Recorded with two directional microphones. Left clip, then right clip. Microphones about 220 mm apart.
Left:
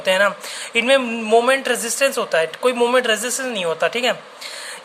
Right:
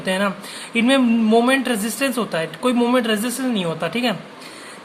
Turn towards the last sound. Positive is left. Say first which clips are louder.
# left 3 dB
turn(degrees=20)  # may be behind; listen again after turning